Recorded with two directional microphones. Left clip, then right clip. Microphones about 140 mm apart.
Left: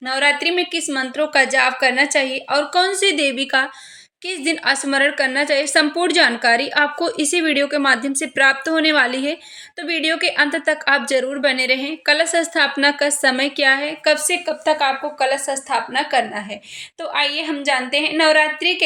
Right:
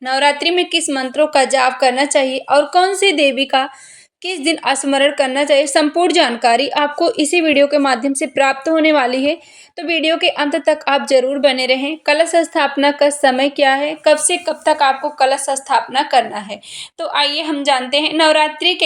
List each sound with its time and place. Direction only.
0.0 s a woman's voice: 35° right (ahead or behind)